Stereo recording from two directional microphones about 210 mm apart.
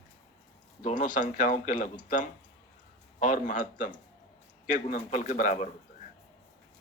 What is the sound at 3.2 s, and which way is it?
Speech, 40° left (ahead or behind).